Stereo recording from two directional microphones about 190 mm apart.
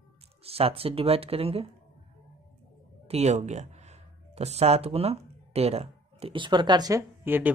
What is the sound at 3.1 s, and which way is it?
Speech, 35° right (ahead or behind).